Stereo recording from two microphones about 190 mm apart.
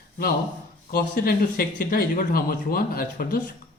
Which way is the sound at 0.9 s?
50° left (ahead or behind).